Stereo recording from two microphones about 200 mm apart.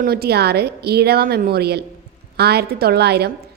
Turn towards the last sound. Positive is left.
turn(degrees=-55)  # may be behind; listen again after turning